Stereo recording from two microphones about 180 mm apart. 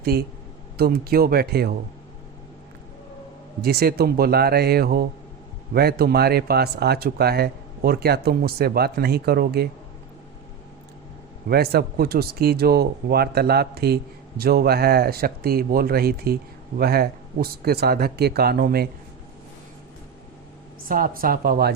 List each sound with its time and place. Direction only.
0.0 s speech: 60° right (ahead or behind)
3.6 s speech: 60° right (ahead or behind)
11.4 s speech: 60° right (ahead or behind)
20.8 s speech: 50° right (ahead or behind)